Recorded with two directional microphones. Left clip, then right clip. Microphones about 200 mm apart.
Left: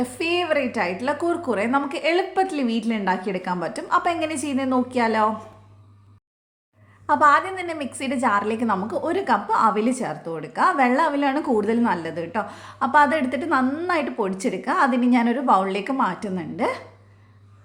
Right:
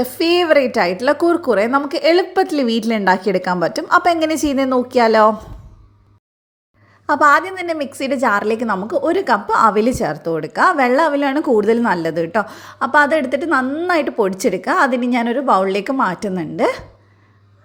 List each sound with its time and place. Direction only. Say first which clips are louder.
0.0 s a woman's voice: right 8 dB; 30° right (ahead or behind)
7.1 s a woman's voice: right 4 dB; 25° right (ahead or behind)